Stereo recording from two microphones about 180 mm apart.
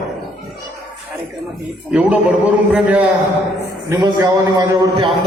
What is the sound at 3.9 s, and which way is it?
A man's voice, 20° right (ahead or behind).